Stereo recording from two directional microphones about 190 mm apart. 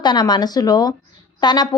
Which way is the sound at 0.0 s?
20° left (ahead or behind).